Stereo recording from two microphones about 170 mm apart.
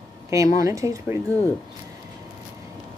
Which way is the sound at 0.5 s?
20° right (ahead or behind).